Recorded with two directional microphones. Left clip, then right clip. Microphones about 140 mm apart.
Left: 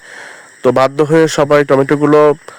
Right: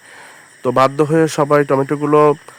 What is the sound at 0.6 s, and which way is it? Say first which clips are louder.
A man's voice: left 3 dB; 40° left (ahead or behind).